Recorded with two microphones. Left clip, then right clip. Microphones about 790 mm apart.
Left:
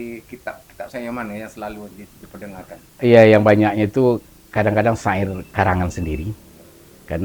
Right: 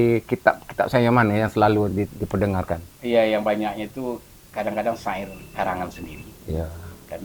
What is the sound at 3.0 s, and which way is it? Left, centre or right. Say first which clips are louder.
Speech: left 9 dB; left.